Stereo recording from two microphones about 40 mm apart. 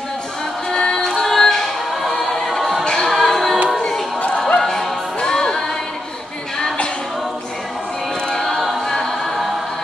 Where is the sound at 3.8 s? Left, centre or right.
Centre.